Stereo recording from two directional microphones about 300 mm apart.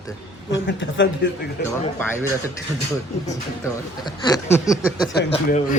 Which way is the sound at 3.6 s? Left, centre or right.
Centre.